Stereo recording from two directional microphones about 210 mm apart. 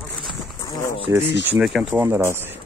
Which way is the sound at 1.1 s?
15° right (ahead or behind).